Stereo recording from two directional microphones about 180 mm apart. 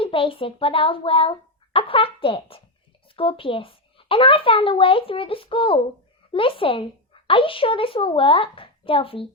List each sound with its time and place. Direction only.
0.0 s a woman's voice: 30° left (ahead or behind)